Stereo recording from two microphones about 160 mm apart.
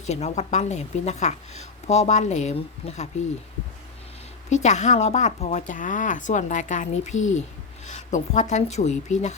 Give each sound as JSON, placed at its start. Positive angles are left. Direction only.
{"t": 0.0, "sound": "speech", "side_deg": 45}
{"t": 4.4, "sound": "speech", "side_deg": 45}